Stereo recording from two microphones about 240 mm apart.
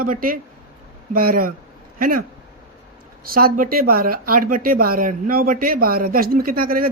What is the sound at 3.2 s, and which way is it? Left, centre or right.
Speech, right.